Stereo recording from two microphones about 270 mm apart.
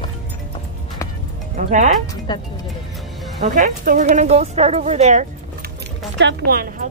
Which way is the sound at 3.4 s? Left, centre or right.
Right.